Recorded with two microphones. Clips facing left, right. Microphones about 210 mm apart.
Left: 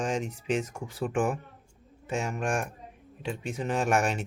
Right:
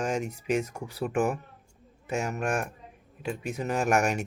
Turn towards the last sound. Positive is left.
turn(degrees=-10)  # may be behind; listen again after turning